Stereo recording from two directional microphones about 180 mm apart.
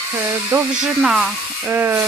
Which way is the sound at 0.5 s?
5° right (ahead or behind).